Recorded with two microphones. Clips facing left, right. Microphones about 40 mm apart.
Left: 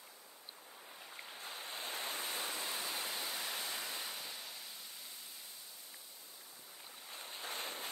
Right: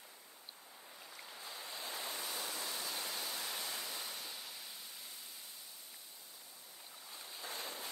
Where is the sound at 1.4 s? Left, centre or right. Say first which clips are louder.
Left 2 dB; left.